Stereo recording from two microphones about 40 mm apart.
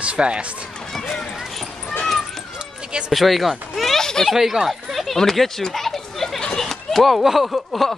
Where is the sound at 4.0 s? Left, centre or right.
Centre.